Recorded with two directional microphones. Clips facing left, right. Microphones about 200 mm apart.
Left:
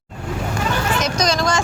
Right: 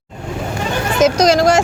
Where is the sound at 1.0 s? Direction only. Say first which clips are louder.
Right 13 dB; 80° right.